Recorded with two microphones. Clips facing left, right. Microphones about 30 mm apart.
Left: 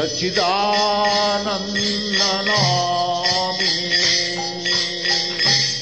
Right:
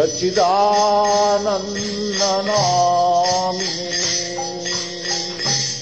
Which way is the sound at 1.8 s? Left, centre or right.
Left.